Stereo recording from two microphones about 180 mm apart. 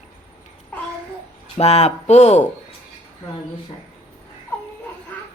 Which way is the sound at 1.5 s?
35° left (ahead or behind).